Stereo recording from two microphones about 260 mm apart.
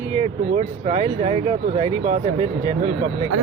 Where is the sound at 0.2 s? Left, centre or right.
Right.